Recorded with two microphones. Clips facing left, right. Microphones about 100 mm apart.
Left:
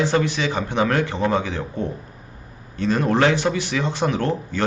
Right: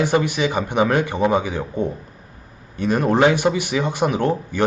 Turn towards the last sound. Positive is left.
turn(degrees=-15)  # may be behind; listen again after turning